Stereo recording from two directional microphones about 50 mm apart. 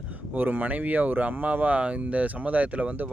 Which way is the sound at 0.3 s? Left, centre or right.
Right.